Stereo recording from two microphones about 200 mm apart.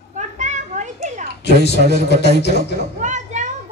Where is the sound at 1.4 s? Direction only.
55° left (ahead or behind).